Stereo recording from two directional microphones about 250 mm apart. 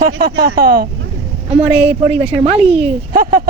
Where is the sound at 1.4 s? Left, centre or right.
Right.